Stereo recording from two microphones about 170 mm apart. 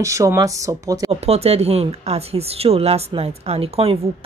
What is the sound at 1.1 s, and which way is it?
Speech, 35° right (ahead or behind).